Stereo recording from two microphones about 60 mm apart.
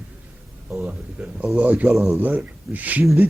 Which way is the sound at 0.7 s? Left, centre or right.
Centre.